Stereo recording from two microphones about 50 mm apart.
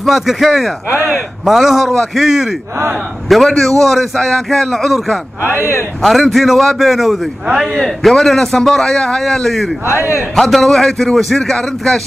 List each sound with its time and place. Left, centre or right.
0.0 s a man's voice: centre
1.9 s a man's voice: centre
3.4 s a man's voice: centre
5.4 s speech: left
6.0 s a man's voice: centre